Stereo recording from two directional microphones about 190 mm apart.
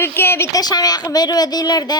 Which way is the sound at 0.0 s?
10° left (ahead or behind).